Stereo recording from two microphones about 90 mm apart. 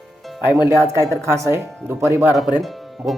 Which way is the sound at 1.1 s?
30° right (ahead or behind).